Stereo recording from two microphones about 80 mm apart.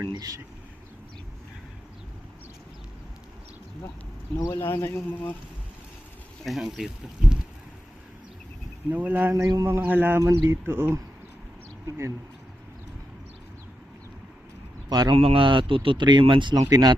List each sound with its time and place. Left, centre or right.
0.0 s speech: right
4.5 s a man's voice: left
6.4 s speech: centre
8.9 s speech: right
9.4 s speech: right
9.6 s speech: right
10.2 s speech: right
14.8 s speech: right
15.4 s speech: right
16.6 s speech: right